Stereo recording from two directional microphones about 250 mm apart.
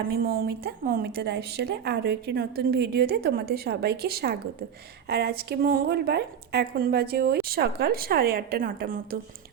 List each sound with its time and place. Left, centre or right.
0.1 s a woman's voice: right